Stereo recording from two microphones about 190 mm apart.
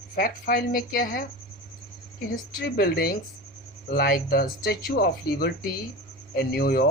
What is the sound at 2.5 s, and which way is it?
Speech, 55° left (ahead or behind).